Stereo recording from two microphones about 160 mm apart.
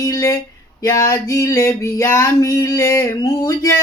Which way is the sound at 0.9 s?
20° left (ahead or behind).